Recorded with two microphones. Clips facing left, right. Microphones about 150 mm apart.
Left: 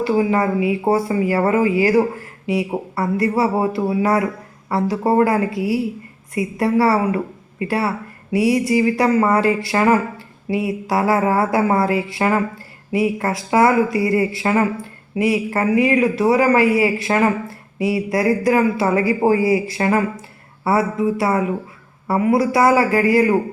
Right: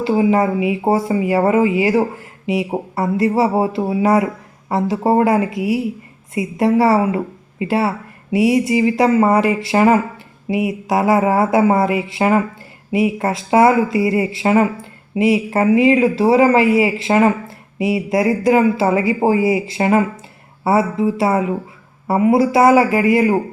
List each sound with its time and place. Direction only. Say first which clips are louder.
0.0 s speech: right 2 dB; 25° right (ahead or behind)